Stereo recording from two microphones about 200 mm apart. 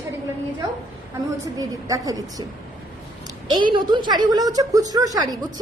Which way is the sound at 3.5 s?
25° right (ahead or behind).